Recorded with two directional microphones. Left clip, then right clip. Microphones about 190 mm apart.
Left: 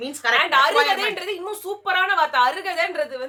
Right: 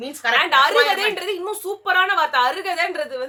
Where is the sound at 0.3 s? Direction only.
10° right (ahead or behind).